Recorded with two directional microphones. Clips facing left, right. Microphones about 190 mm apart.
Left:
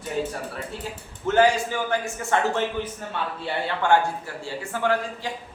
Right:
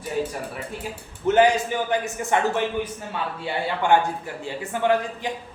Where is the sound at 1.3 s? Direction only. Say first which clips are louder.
Right 2 dB; 20° right (ahead or behind).